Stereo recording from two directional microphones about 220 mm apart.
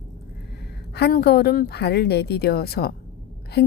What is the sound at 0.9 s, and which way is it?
A woman's voice, 45° left (ahead or behind).